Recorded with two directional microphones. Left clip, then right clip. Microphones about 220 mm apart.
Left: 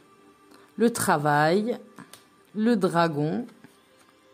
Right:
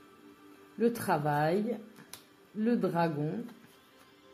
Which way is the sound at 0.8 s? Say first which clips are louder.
Left 7 dB; 30° left (ahead or behind).